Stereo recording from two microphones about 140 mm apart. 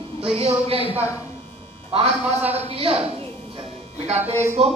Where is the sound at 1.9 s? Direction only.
45° right (ahead or behind).